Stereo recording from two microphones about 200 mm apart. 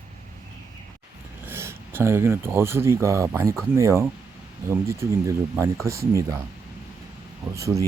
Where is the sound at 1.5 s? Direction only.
10° right (ahead or behind).